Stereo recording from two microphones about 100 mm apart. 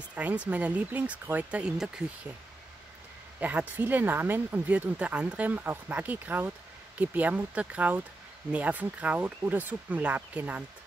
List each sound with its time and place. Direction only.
0.1 s speech: 15° right (ahead or behind)
3.3 s speech: 15° right (ahead or behind)